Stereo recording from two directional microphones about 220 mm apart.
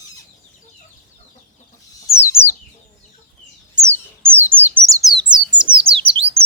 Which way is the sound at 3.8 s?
10° right (ahead or behind).